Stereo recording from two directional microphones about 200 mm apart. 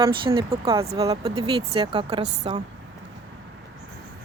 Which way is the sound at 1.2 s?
30° right (ahead or behind).